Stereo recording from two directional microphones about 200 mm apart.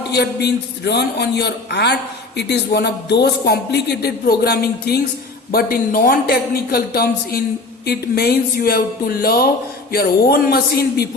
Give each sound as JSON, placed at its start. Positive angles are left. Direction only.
{"t": 0.1, "sound": "a man's voice", "side_deg": 55}